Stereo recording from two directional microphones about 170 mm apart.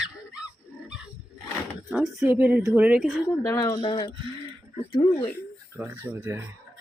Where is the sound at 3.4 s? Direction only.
20° left (ahead or behind).